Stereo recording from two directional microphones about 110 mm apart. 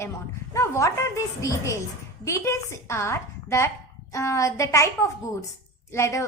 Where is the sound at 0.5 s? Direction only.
25° left (ahead or behind).